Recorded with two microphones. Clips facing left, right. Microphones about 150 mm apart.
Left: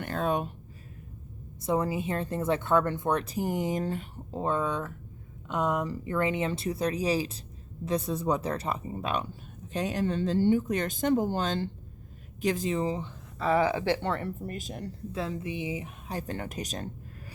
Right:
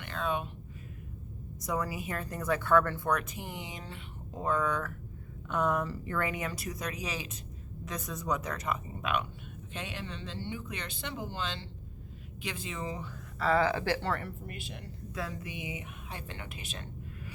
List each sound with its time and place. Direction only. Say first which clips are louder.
0.0 s speech: left 5 dB; 45° left (ahead or behind)
1.6 s speech: left 6 dB; 25° left (ahead or behind); by 4.0 s 45° left (ahead or behind)
4.3 s speech: left 2 dB; 25° left (ahead or behind)
13.4 s speech: left 2 dB; 15° left (ahead or behind)
14.4 s speech: left 7 dB; 40° left (ahead or behind)
15.1 s speech: left 5 dB; 25° left (ahead or behind)